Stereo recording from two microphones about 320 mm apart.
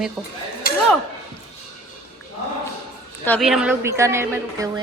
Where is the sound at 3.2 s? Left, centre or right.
Centre.